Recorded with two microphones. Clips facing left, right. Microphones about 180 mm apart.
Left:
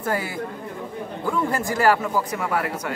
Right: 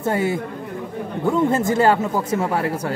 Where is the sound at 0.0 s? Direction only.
25° right (ahead or behind).